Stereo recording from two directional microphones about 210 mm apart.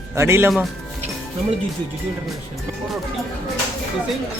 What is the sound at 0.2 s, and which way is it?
Speech, 10° right (ahead or behind).